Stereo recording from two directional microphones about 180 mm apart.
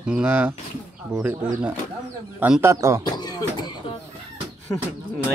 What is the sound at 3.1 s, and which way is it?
Speech, 25° left (ahead or behind).